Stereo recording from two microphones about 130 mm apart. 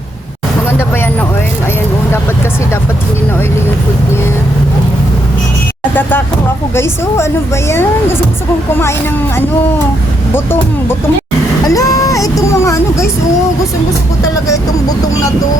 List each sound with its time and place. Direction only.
6.0 s vehicle: 15° left (ahead or behind)
6.7 s a woman's voice: 20° left (ahead or behind)
11.7 s vehicle: 25° left (ahead or behind)
14.4 s a woman's voice: 25° left (ahead or behind)